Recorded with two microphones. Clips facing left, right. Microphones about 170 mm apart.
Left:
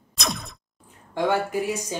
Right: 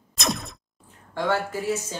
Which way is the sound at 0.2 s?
Centre (ahead or behind).